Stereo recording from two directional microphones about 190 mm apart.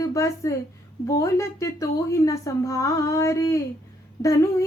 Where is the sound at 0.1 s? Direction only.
15° left (ahead or behind).